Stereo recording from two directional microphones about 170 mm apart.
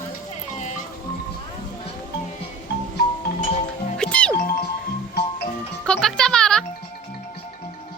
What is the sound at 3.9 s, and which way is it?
Music, 5° left (ahead or behind).